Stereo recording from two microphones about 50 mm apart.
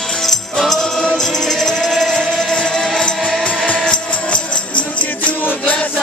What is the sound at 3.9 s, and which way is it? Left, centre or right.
Music, left.